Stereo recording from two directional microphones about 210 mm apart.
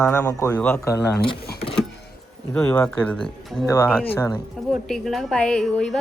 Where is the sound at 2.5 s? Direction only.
5° left (ahead or behind).